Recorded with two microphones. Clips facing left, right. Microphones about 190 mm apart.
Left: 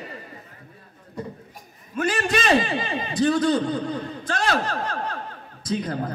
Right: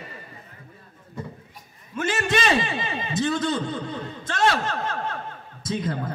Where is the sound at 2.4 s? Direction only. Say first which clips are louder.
Left 6 dB; 45° left (ahead or behind).